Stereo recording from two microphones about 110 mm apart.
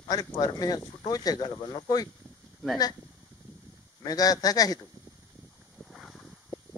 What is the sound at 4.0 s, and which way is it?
Speech, 35° left (ahead or behind).